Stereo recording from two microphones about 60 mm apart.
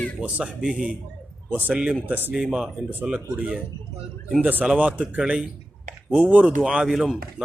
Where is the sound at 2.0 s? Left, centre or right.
Right.